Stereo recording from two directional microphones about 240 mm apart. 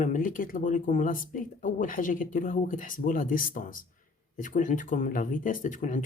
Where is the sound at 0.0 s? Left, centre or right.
Left.